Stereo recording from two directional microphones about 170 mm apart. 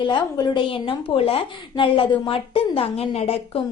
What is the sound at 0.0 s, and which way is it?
A woman's voice, 25° left (ahead or behind).